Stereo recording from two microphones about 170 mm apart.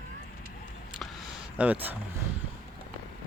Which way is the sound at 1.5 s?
10° right (ahead or behind).